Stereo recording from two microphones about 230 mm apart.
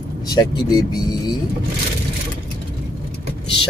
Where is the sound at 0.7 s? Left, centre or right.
Centre.